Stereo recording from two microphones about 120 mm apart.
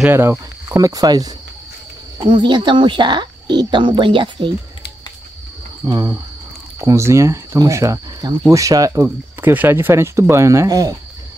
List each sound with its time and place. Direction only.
0.1 s speech: 20° right (ahead or behind)
0.7 s speech: 30° right (ahead or behind)
5.9 s speech: 35° right (ahead or behind)
6.8 s speech: 25° right (ahead or behind)
9.4 s speech: 15° right (ahead or behind)